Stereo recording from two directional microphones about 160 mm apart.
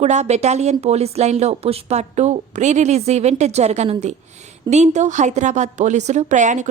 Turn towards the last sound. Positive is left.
turn(degrees=-50)  # may be behind; listen again after turning